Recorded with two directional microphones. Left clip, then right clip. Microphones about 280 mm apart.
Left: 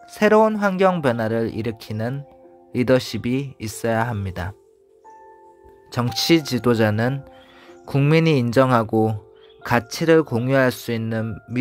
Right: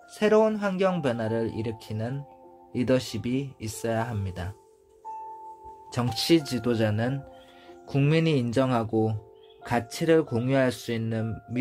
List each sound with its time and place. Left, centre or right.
0.1 s speech: left
5.9 s speech: left